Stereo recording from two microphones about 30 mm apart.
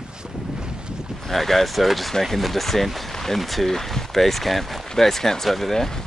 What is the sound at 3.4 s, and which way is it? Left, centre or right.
Speech, centre.